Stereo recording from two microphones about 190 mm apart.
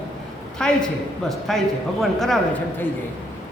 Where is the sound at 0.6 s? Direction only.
5° left (ahead or behind).